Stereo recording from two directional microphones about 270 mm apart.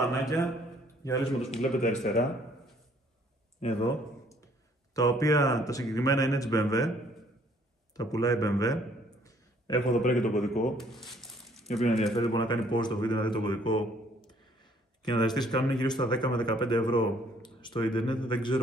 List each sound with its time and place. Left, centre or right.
1.0 s a man's voice: centre
1.9 s a man's voice: centre
3.6 s a man's voice: left
7.9 s a man's voice: centre
9.2 s a sound: centre
10.1 s a man's voice: centre
10.8 s a sound: centre
11.7 s a man's voice: centre
12.2 s a man's voice: centre